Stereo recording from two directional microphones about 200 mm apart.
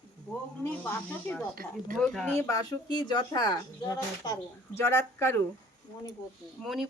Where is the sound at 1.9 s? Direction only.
Centre (ahead or behind).